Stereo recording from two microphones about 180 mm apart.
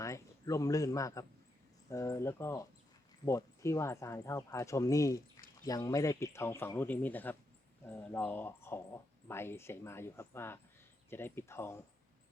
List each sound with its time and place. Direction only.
0.0 s speech: 15° left (ahead or behind)